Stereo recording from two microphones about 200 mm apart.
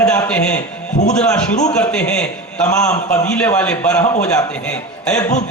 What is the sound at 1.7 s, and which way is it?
A man's voice, 5° left (ahead or behind).